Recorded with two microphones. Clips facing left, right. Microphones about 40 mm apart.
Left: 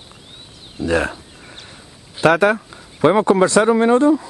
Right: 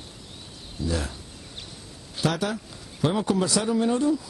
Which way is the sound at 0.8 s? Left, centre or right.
Left.